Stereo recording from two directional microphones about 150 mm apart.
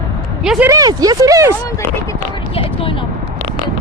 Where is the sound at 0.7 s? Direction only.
25° right (ahead or behind).